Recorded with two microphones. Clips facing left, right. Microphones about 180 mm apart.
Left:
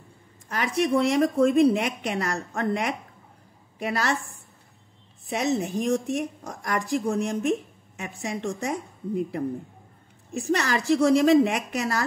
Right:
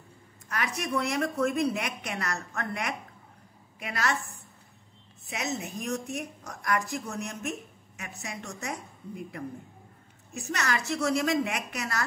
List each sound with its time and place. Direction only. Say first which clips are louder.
0.5 s a woman's voice: left 8 dB; 30° left (ahead or behind)
5.2 s a woman's voice: left 8 dB; 30° left (ahead or behind)
10.3 s a woman's voice: left 6 dB; 30° left (ahead or behind)